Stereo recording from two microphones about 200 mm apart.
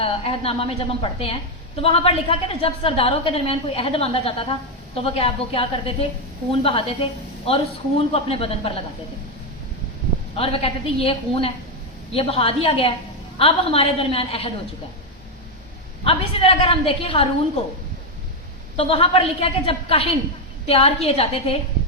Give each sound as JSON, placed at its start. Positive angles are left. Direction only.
{"t": 0.0, "sound": "a woman's voice", "side_deg": 30}
{"t": 10.3, "sound": "a woman's voice", "side_deg": 30}
{"t": 16.0, "sound": "a woman's voice", "side_deg": 30}
{"t": 18.8, "sound": "a woman's voice", "side_deg": 30}